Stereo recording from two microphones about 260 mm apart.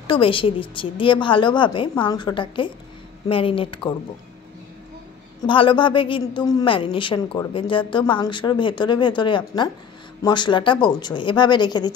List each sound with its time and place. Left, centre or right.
0.0 s a woman's voice: centre
5.5 s a woman's voice: centre